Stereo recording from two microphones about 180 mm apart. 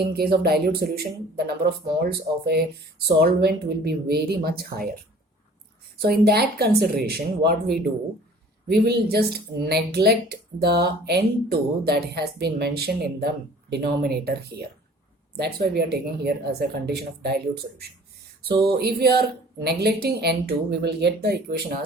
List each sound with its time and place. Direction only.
0.1 s speech: 60° right (ahead or behind)
6.0 s speech: 60° right (ahead or behind)